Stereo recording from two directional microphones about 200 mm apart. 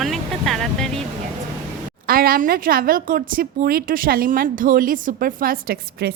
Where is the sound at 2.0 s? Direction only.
45° right (ahead or behind).